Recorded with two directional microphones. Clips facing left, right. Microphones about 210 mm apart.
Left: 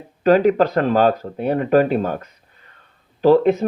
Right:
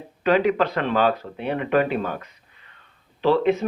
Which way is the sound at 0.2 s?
40° left (ahead or behind).